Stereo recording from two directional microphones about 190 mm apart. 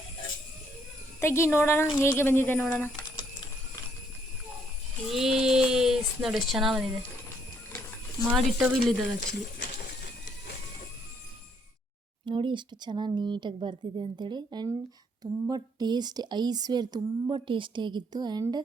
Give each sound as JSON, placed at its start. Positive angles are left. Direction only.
{"t": 1.2, "sound": "speech", "side_deg": 15}
{"t": 5.0, "sound": "speech", "side_deg": 0}
{"t": 8.2, "sound": "speech", "side_deg": 0}
{"t": 9.2, "sound": "speech", "side_deg": 65}
{"t": 12.2, "sound": "a woman's voice", "side_deg": -25}